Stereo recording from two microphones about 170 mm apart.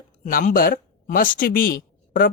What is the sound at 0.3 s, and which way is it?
Speech, 55° left (ahead or behind).